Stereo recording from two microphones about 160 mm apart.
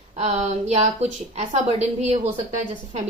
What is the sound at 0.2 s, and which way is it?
A woman's voice, 45° right (ahead or behind).